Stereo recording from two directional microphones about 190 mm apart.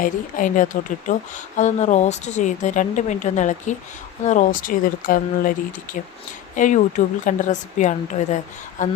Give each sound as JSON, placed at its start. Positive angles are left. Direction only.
{"t": 0.0, "sound": "speech", "side_deg": 45}